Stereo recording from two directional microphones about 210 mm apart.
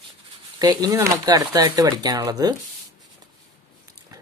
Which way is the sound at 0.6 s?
20° right (ahead or behind).